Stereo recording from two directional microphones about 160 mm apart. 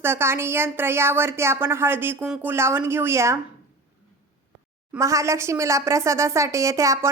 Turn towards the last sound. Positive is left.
turn(degrees=-20)  # may be behind; listen again after turning